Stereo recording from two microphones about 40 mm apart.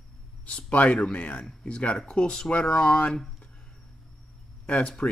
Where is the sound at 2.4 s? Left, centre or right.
Left.